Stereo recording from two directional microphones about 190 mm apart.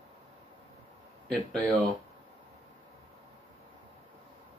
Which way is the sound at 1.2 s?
Centre (ahead or behind).